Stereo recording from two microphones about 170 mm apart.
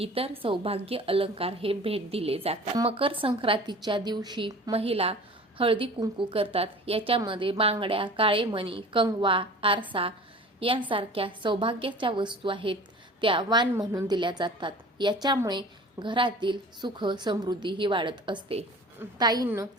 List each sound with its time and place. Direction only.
0.0 s a woman's voice: 35° right (ahead or behind)